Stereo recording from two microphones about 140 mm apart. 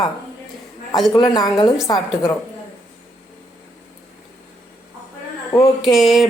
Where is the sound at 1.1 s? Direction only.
25° left (ahead or behind).